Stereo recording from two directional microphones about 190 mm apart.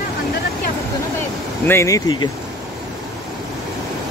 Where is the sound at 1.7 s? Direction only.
15° left (ahead or behind).